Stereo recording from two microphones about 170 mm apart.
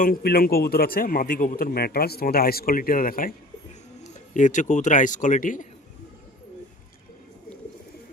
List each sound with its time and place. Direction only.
0.0 s a man's voice: 60° left (ahead or behind)